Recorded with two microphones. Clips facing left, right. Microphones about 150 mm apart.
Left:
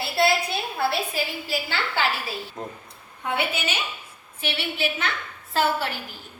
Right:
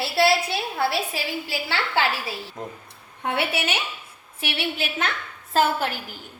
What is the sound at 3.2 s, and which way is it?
Speech, 75° right (ahead or behind).